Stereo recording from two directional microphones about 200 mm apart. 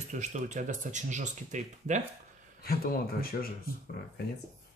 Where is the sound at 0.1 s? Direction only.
35° right (ahead or behind).